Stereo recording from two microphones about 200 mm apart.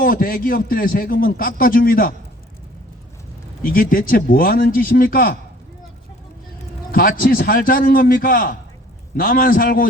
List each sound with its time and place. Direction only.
0.0 s a man's voice: 45° left (ahead or behind)
3.6 s a man's voice: 45° left (ahead or behind)
6.9 s a man's voice: 45° left (ahead or behind)